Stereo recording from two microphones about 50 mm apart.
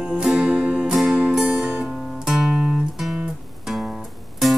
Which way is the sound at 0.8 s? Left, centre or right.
Centre.